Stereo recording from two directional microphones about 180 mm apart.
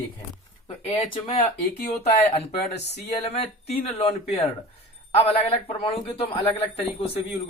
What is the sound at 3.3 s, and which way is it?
A man's voice, 35° left (ahead or behind).